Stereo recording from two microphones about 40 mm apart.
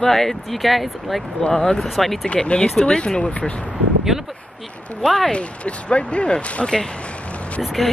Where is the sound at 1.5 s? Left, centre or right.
Centre.